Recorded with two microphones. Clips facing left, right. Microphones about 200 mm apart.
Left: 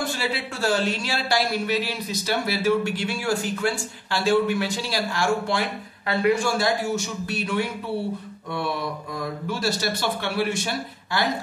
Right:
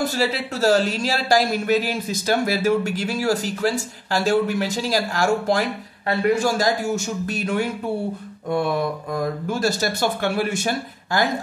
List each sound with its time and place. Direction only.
0.0 s speech: 40° right (ahead or behind)